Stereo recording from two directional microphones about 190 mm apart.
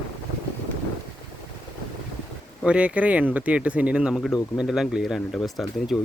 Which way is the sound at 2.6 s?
5° right (ahead or behind).